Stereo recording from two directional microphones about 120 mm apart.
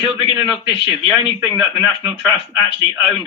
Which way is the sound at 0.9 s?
15° right (ahead or behind).